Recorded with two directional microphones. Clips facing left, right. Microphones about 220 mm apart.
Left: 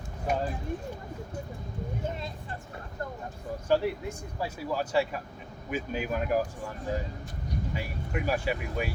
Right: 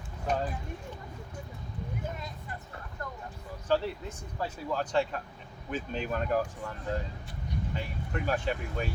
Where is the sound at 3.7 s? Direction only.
10° left (ahead or behind).